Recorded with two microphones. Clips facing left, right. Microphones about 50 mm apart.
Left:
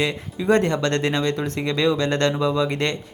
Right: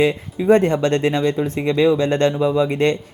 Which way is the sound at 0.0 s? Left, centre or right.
Centre.